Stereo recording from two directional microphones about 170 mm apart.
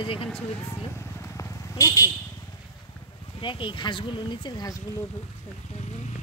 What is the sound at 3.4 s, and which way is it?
Speech, 30° left (ahead or behind).